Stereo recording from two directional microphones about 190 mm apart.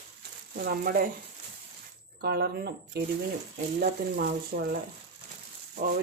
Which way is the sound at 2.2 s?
55° right (ahead or behind).